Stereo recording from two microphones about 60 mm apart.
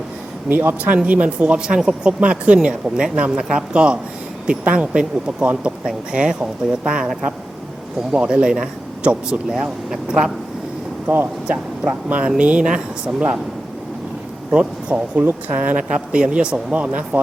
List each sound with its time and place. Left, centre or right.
0.4 s speech: right
1.0 s speech: right
1.5 s speech: centre
11.0 s speech: right
12.0 s speech: right
14.5 s speech: centre
15.2 s speech: right
16.1 s speech: centre